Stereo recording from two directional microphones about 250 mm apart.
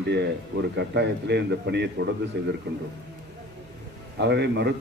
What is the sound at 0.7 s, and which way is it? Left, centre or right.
A man's voice, right.